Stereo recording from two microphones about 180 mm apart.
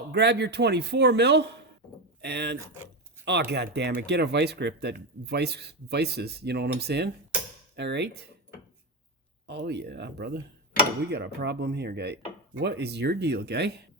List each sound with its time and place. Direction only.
0.1 s speech: 70° right (ahead or behind)
9.5 s speech: 65° right (ahead or behind)